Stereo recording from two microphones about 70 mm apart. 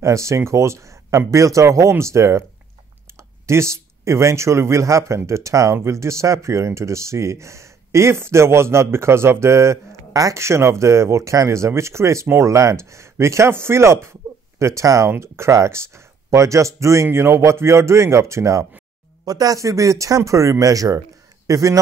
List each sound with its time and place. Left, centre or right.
0.0 s speech: right
19.2 s speech: right